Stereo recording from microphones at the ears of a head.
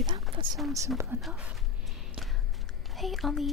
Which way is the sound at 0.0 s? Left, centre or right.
Right.